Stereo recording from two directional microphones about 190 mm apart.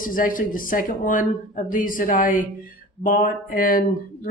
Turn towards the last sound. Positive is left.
turn(degrees=50)  # may be behind; listen again after turning